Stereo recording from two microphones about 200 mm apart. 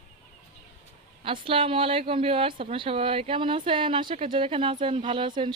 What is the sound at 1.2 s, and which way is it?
Speech, 25° right (ahead or behind).